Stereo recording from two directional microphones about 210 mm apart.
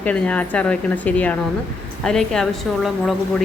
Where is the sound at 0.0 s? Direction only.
5° left (ahead or behind).